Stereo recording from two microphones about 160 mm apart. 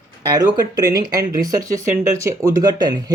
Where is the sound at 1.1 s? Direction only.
20° right (ahead or behind).